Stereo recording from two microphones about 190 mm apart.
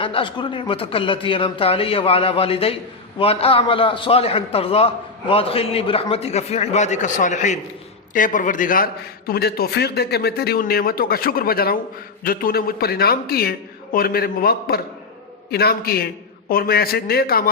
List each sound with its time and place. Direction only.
0.0 s a man's voice: 25° left (ahead or behind); by 17.5 s 50° left (ahead or behind)